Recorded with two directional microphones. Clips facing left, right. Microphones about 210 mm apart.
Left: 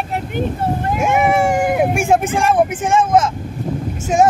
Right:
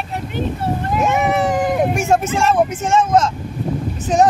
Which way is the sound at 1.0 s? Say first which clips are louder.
Left 3 dB; 10° left (ahead or behind).